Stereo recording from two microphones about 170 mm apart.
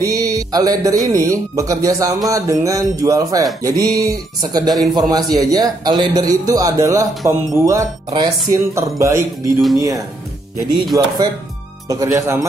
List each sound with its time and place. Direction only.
0.0 s a man's voice: 20° right (ahead or behind)
8.5 s a sound: 15° right (ahead or behind)
10.9 s a man's voice: 20° right (ahead or behind)